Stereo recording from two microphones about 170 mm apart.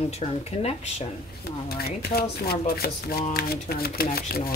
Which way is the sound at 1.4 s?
65° left (ahead or behind).